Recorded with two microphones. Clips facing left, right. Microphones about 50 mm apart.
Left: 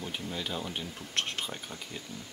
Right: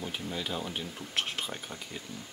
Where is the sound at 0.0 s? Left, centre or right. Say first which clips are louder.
Right 1 dB; centre.